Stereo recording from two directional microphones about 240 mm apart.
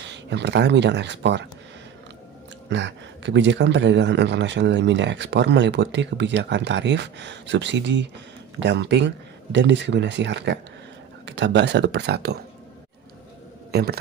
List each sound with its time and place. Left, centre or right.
0.1 s a man's voice: right
2.7 s a man's voice: right
13.7 s a man's voice: right